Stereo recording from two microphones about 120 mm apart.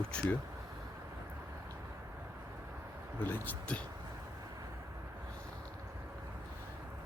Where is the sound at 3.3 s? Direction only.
15° left (ahead or behind).